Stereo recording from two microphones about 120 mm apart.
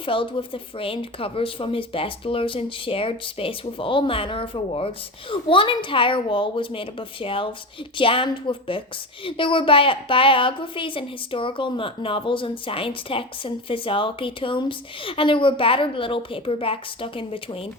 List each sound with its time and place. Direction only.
0.0 s a woman's voice: 45° left (ahead or behind)